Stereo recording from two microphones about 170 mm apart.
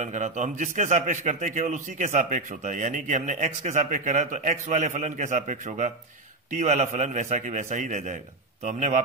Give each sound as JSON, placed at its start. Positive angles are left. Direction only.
{"t": 0.0, "sound": "a man's voice", "side_deg": -45}